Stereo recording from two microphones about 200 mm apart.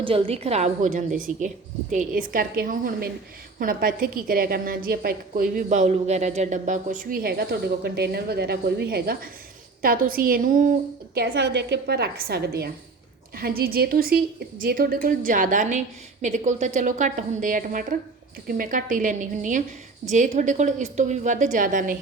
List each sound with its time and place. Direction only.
0.0 s a woman's voice: 25° right (ahead or behind)